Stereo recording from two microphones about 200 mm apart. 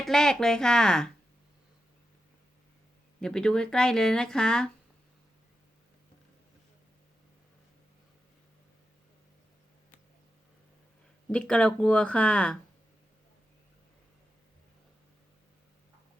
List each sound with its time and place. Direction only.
0.0 s speech: centre (ahead or behind)
3.2 s speech: 5° left (ahead or behind)
11.3 s speech: 5° left (ahead or behind)